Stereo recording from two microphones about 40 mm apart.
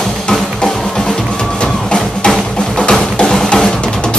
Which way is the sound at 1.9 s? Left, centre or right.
Centre.